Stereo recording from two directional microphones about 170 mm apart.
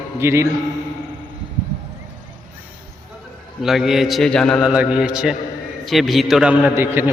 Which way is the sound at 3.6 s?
Centre (ahead or behind).